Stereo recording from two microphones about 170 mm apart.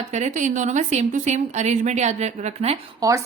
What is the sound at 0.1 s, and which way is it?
A woman's voice, 45° right (ahead or behind).